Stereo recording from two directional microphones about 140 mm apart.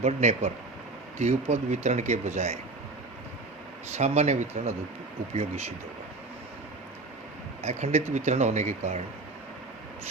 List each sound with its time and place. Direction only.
0.0 s speech: 50° right (ahead or behind)
3.9 s speech: 50° right (ahead or behind)
7.6 s speech: 50° right (ahead or behind)